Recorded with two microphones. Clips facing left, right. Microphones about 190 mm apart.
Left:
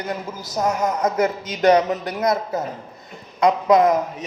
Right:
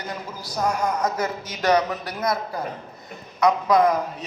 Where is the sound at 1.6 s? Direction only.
20° left (ahead or behind).